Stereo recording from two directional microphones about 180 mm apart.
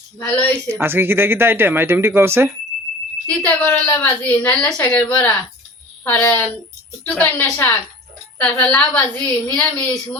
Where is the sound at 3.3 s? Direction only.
10° left (ahead or behind).